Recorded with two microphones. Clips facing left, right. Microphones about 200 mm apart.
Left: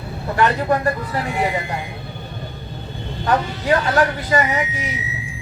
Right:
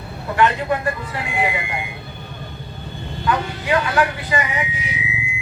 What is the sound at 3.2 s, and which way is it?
Speech, 40° left (ahead or behind).